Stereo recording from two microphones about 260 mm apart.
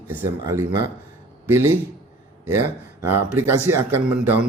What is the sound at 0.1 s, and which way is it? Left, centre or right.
Speech, centre.